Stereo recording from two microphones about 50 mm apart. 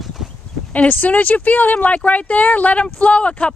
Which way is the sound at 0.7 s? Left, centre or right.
Left.